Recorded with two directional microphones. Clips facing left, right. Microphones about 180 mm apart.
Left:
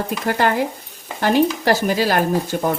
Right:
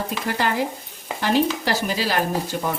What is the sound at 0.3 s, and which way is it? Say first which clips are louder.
Speech: left 5 dB; 55° left (ahead or behind).